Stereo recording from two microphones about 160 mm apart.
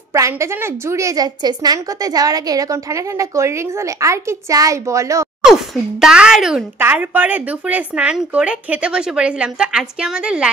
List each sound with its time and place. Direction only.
0.1 s a woman's voice: 20° right (ahead or behind)
5.4 s speech: 5° right (ahead or behind)